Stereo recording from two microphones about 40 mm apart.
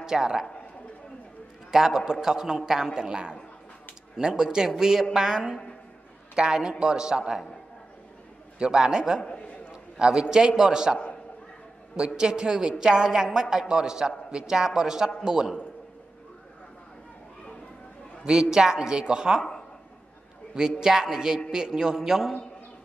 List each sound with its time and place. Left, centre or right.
0.0 s a man's voice: centre
1.7 s a woman's voice: centre
8.5 s a woman's voice: right
9.7 s a sound: right
10.3 s a woman's voice: centre
12.2 s a woman's voice: centre
18.2 s a woman's voice: centre
20.8 s a woman's voice: centre